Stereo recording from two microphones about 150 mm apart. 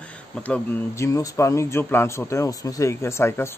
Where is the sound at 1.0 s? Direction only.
20° left (ahead or behind).